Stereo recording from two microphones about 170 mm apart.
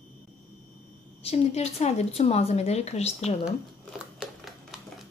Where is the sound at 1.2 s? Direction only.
40° left (ahead or behind).